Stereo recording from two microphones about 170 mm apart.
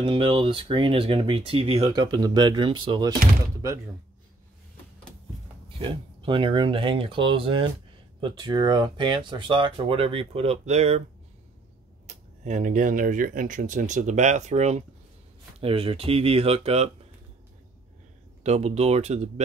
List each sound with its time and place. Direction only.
0.0 s speech: 30° right (ahead or behind)
5.8 s speech: 30° right (ahead or behind)
12.1 s speech: 45° right (ahead or behind)
18.4 s speech: 40° right (ahead or behind)